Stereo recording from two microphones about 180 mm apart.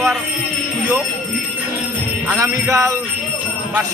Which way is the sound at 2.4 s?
15° right (ahead or behind).